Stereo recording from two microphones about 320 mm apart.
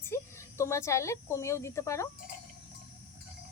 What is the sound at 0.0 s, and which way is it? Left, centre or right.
Speech, centre.